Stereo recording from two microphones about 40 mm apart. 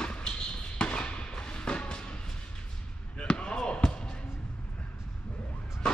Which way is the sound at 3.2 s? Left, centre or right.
Left.